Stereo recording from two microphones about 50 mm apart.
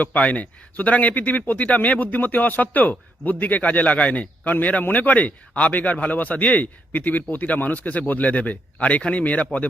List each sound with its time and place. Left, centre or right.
0.0 s speech: left